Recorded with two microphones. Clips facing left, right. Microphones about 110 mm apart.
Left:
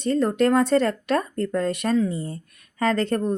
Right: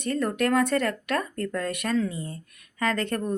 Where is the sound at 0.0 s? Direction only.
30° left (ahead or behind).